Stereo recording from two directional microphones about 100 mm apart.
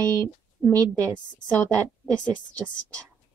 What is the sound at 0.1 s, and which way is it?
Speech, 20° left (ahead or behind).